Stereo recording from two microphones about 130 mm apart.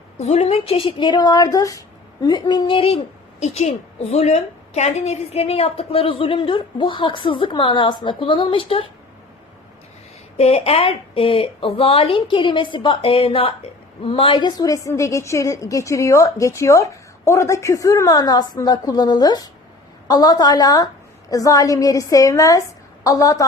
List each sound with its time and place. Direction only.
0.2 s speech: 55° left (ahead or behind)
3.4 s a woman's voice: 55° left (ahead or behind)
10.3 s a woman's voice: 55° left (ahead or behind); by 23.5 s 25° left (ahead or behind)